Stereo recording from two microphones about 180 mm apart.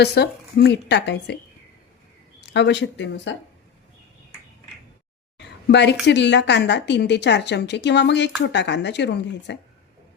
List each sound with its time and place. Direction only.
0.0 s a woman's voice: 65° left (ahead or behind)
2.5 s speech: 75° left (ahead or behind)
5.4 s a woman's voice: 75° left (ahead or behind)